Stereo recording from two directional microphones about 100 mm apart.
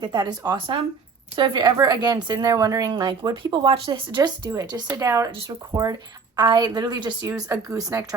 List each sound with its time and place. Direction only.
0.0 s speech: 45° right (ahead or behind)
4.5 s speech: 40° right (ahead or behind)